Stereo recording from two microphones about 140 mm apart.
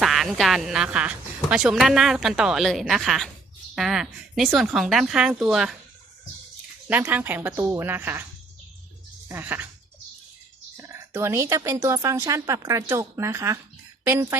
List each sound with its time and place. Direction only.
0.0 s a woman's voice: centre (ahead or behind)
6.8 s speech: 10° right (ahead or behind)
9.3 s speech: 15° right (ahead or behind)
10.8 s a woman's voice: 20° right (ahead or behind)